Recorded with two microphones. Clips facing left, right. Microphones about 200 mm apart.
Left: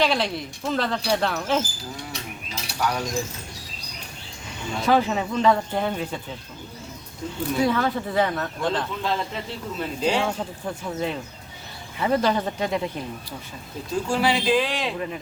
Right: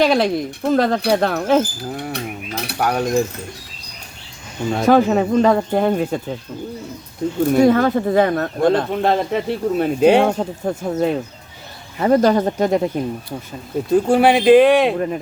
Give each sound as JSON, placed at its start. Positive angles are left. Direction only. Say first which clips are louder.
{"t": 0.0, "sound": "speech", "louder": "right 8 dB", "side_deg": -45}
{"t": 1.1, "sound": "mechanisms", "louder": "right 6 dB", "side_deg": -50}
{"t": 4.7, "sound": "speech", "louder": "right 7 dB", "side_deg": -55}
{"t": 7.4, "sound": "speech", "louder": "right 9 dB", "side_deg": -50}
{"t": 13.9, "sound": "mechanisms", "louder": "right 9 dB", "side_deg": -60}